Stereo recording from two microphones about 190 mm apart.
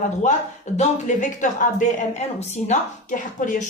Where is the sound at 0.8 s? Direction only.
40° left (ahead or behind).